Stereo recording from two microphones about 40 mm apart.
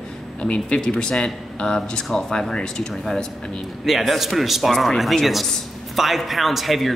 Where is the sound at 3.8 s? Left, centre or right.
Centre.